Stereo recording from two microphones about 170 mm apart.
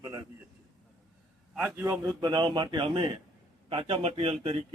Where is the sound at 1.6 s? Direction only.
10° right (ahead or behind).